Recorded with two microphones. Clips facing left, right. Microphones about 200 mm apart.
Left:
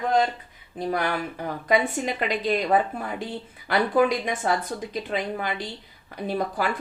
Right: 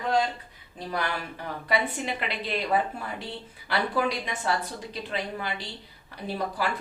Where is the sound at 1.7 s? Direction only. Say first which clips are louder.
Left 5 dB; 45° left (ahead or behind).